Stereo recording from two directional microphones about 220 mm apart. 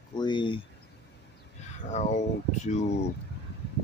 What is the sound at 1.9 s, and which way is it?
Speech, 30° left (ahead or behind).